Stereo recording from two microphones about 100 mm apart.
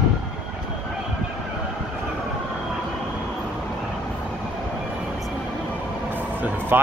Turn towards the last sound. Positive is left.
turn(degrees=-20)  # may be behind; listen again after turning